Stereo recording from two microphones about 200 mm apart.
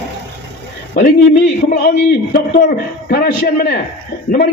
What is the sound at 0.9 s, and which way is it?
A man's voice, 45° left (ahead or behind).